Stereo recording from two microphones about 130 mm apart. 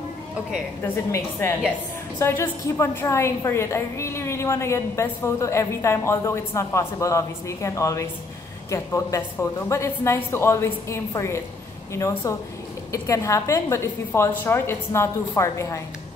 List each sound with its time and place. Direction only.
0.8 s a woman's voice: 20° left (ahead or behind)